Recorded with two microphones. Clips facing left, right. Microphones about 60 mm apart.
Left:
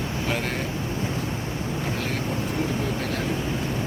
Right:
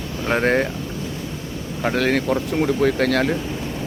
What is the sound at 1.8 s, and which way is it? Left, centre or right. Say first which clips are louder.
Speech: right 13 dB; right.